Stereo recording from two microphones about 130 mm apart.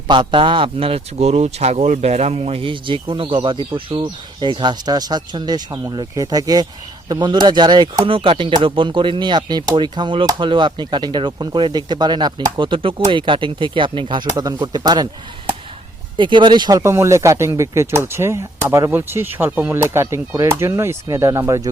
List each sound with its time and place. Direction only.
0.1 s speech: 35° right (ahead or behind)
16.1 s speech: 40° right (ahead or behind)